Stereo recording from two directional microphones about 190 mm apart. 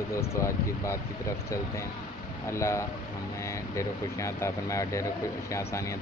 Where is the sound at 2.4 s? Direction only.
15° left (ahead or behind).